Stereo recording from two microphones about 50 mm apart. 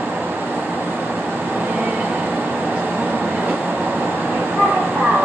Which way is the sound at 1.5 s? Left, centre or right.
Right.